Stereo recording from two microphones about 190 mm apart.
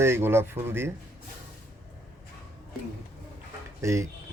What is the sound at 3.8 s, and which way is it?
Speech, 15° right (ahead or behind).